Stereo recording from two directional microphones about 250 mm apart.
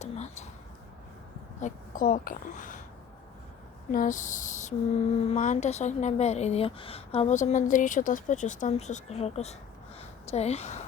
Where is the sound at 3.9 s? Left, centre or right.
Left.